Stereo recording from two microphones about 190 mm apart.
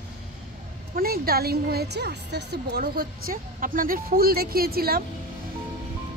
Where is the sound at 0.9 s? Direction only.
50° right (ahead or behind).